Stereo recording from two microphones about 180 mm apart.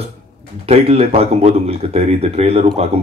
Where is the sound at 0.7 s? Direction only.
35° right (ahead or behind).